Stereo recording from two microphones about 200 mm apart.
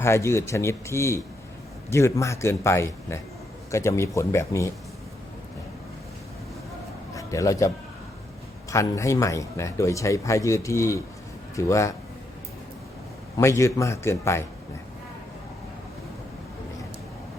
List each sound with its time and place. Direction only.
0.0 s speech: 15° left (ahead or behind)
7.1 s a sound: 15° left (ahead or behind)
8.7 s speech: 15° left (ahead or behind)
13.3 s speech: 15° left (ahead or behind)